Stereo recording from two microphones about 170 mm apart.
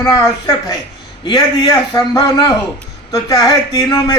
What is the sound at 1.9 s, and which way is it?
Speech, 25° left (ahead or behind).